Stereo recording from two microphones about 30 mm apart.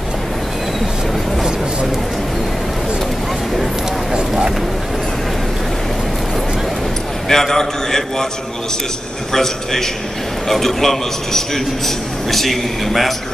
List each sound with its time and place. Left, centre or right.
7.2 s a man's voice: centre
9.3 s a man's voice: centre